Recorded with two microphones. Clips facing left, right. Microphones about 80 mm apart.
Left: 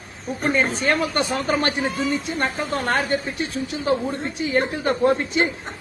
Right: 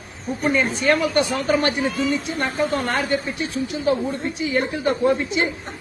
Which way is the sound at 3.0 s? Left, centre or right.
Left.